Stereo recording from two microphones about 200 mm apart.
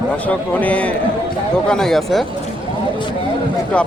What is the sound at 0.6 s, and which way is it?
Speech, 5° left (ahead or behind).